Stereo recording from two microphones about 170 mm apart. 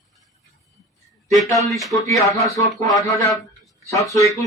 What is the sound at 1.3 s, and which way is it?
Speech, centre (ahead or behind).